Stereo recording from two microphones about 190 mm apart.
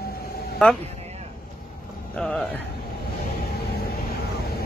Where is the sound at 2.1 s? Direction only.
5° left (ahead or behind).